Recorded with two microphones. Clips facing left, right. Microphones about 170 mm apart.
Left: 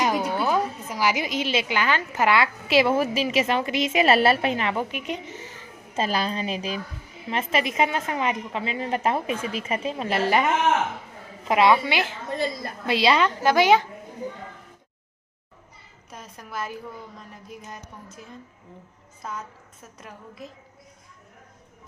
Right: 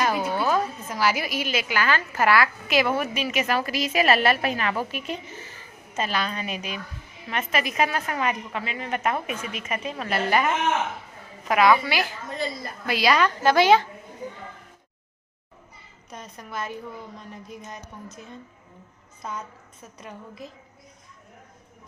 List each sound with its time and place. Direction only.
0.0 s a woman's voice: 15° left (ahead or behind)
5.9 s a woman's voice: 30° left (ahead or behind)
13.4 s a child's voice: 15° left (ahead or behind)
16.0 s a woman's voice: 5° left (ahead or behind)